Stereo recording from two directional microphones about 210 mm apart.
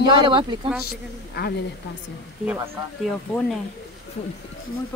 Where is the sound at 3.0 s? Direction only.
Centre (ahead or behind).